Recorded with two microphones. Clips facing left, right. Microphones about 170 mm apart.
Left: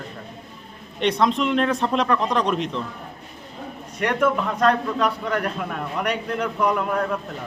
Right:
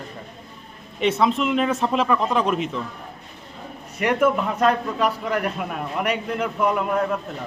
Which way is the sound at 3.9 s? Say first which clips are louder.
Right 2 dB; 5° right (ahead or behind).